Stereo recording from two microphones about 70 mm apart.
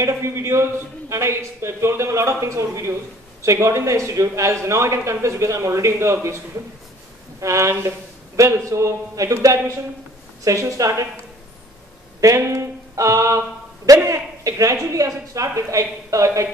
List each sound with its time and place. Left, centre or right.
0.0 s a man's voice: right
12.2 s a sound: right
13.8 s a man's voice: right